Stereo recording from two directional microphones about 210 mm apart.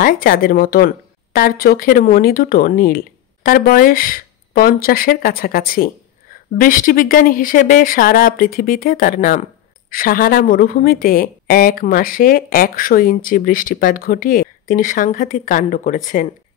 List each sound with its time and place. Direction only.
0.0 s speech: 40° left (ahead or behind)